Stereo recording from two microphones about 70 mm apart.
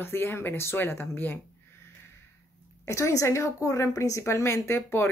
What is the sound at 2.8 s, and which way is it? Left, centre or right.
A woman's voice, left.